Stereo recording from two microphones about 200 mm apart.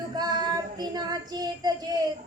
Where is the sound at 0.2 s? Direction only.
20° right (ahead or behind).